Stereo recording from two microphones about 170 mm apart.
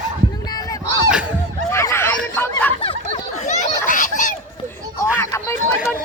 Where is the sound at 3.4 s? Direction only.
45° left (ahead or behind).